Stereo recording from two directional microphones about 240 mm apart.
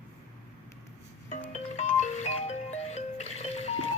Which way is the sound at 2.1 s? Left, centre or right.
Left.